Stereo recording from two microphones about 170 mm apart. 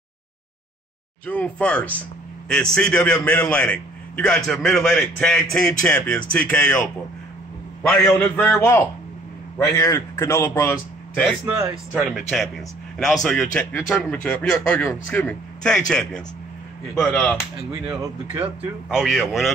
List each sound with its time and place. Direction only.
1.2 s speech: 10° left (ahead or behind)
8.2 s a man's voice: 10° left (ahead or behind)
11.9 s speech: centre (ahead or behind)
17.8 s speech: 10° right (ahead or behind)